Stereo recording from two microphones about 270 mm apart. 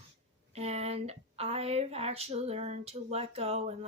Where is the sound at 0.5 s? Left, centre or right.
Right.